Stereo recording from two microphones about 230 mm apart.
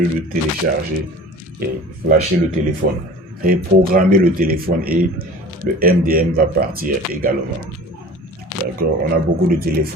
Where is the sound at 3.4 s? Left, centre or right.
Right.